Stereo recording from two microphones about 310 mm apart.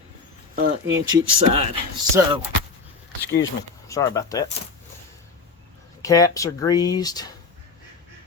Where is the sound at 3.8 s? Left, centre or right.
Centre.